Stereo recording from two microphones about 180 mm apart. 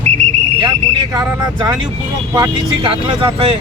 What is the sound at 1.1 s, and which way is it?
Speech, 20° right (ahead or behind).